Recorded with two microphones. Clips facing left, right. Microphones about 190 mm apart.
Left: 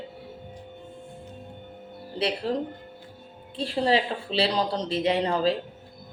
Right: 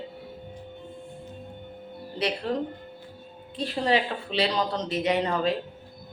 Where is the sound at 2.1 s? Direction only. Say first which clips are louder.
Left 1 dB; 30° left (ahead or behind).